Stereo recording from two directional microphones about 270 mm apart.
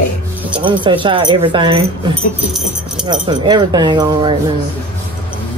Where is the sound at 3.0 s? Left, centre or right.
Centre.